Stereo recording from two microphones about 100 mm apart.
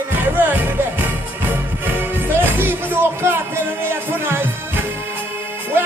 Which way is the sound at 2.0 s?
20° right (ahead or behind).